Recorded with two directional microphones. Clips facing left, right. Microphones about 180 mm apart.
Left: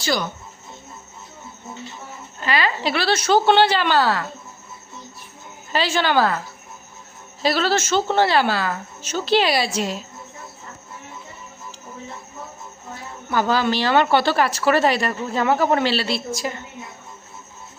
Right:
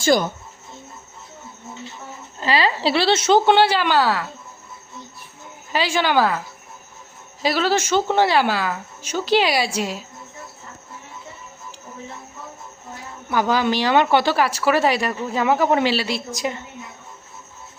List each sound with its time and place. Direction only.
0.0 s speech: 50° right (ahead or behind)
2.4 s a woman's voice: 30° right (ahead or behind); by 4.3 s 10° right (ahead or behind)
5.7 s speech: 10° right (ahead or behind)
7.4 s speech: 15° right (ahead or behind)
13.3 s speech: 15° right (ahead or behind)